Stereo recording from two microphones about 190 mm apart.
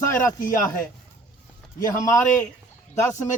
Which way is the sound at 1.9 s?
15° left (ahead or behind).